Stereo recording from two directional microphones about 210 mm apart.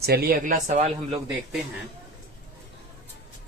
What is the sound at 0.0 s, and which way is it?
Speech, 45° right (ahead or behind).